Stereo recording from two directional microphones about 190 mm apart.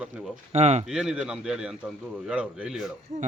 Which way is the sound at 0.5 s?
35° right (ahead or behind).